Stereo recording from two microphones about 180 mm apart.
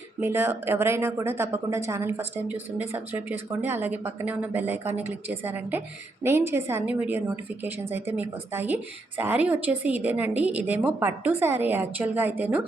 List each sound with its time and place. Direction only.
0.2 s a woman's voice: 15° right (ahead or behind)